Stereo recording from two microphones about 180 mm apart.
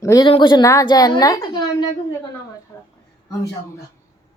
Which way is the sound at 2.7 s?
15° left (ahead or behind).